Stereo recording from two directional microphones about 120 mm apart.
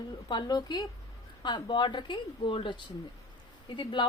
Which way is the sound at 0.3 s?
35° left (ahead or behind).